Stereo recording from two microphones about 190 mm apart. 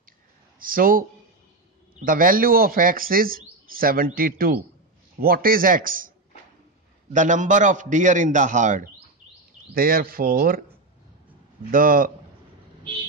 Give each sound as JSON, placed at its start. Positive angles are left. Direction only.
{"t": 0.6, "sound": "a man's voice", "side_deg": -50}
{"t": 11.7, "sound": "speech", "side_deg": -50}